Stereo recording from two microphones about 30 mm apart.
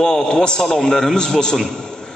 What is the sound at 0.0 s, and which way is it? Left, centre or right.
A man's voice, left.